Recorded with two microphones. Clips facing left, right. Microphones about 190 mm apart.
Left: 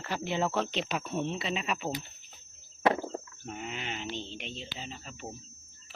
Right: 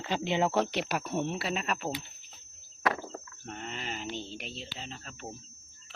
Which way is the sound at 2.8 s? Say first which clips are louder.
Left 4 dB; 25° left (ahead or behind).